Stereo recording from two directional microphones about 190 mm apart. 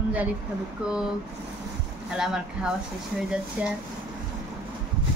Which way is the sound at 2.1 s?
5° right (ahead or behind).